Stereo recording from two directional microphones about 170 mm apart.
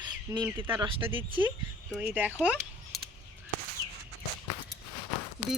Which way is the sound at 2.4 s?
5° right (ahead or behind).